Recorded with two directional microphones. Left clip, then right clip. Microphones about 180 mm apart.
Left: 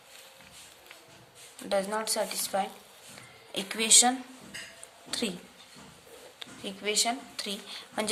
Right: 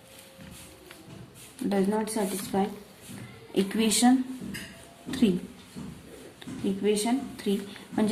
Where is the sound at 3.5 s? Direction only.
30° left (ahead or behind).